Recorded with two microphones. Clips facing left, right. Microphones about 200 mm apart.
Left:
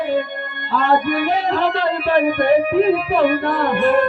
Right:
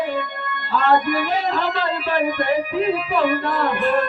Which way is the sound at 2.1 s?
60° left (ahead or behind).